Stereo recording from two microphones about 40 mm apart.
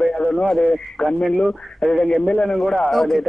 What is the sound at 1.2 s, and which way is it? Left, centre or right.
Speech, left.